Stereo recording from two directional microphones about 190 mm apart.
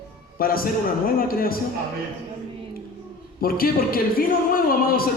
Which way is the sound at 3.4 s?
50° left (ahead or behind).